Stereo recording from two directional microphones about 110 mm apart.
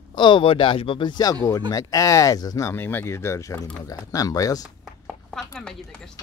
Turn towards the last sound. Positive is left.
turn(degrees=5)  # may be behind; listen again after turning